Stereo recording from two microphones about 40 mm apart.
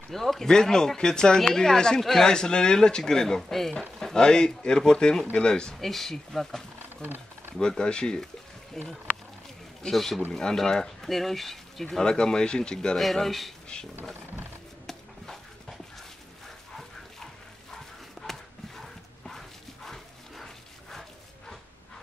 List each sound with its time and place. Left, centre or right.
0.1 s speech: centre
5.8 s speech: centre
7.0 s wild animals: right
7.6 s speech: centre
8.8 s speech: centre
12.0 s speech: centre
13.0 s speech: centre
18.2 s bow-wow: centre